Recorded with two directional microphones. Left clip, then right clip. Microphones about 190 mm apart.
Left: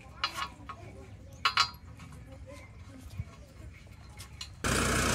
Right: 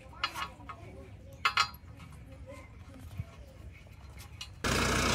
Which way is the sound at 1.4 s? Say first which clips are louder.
Left 1 dB; 5° left (ahead or behind).